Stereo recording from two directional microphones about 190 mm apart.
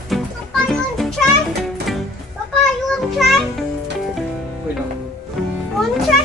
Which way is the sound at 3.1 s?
Centre (ahead or behind).